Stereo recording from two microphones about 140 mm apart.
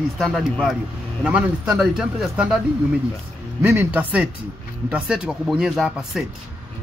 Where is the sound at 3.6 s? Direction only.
15° right (ahead or behind).